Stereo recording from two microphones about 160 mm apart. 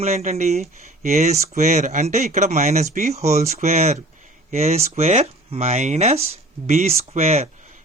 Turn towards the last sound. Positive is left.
turn(degrees=-40)  # may be behind; listen again after turning